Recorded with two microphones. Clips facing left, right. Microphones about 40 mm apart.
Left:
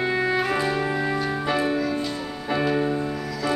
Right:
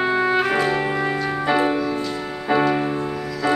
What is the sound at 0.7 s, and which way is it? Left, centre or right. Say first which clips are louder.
Music: right 3 dB; right.